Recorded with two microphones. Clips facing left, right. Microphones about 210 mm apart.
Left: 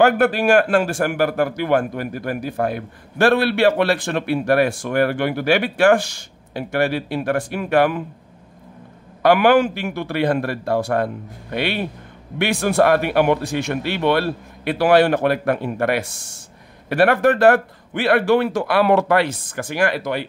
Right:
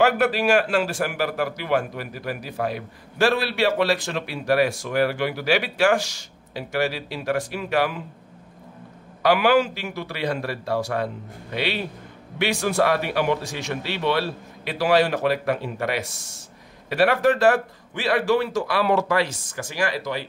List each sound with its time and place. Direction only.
0.0 s a man's voice: 50° left (ahead or behind)
9.2 s a man's voice: 55° left (ahead or behind)